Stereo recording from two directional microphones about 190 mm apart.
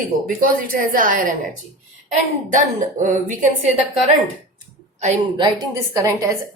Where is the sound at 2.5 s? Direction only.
40° right (ahead or behind).